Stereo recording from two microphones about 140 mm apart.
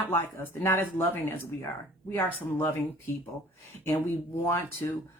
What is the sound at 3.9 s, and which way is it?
Speech, 15° left (ahead or behind).